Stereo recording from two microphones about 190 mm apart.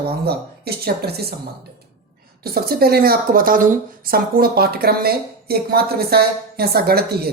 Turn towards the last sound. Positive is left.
turn(degrees=-55)  # may be behind; listen again after turning